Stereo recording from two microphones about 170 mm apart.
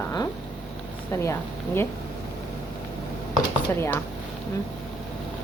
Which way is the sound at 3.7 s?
10° left (ahead or behind).